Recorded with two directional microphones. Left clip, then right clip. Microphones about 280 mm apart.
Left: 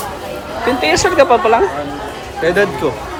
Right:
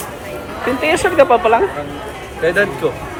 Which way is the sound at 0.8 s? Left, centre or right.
Centre.